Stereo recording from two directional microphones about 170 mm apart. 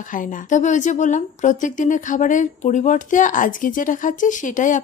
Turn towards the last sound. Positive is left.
turn(degrees=50)  # may be behind; listen again after turning